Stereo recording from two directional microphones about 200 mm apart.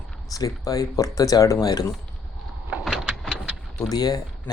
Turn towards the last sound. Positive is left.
turn(degrees=20)  # may be behind; listen again after turning